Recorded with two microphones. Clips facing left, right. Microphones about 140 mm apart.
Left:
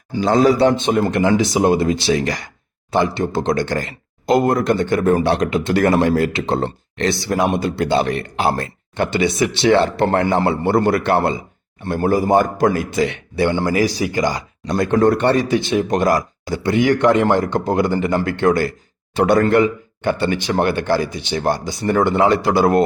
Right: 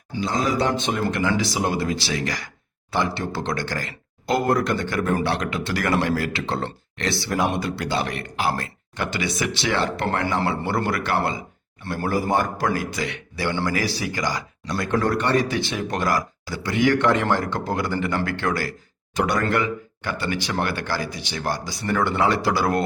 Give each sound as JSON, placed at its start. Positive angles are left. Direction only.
{"t": 0.3, "sound": "speech", "side_deg": 30}